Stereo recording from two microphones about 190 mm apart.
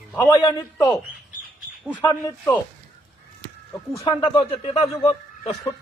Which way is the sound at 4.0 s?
25° left (ahead or behind).